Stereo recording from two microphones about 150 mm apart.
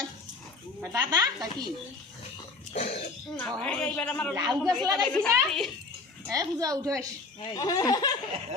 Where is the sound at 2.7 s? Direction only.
45° left (ahead or behind).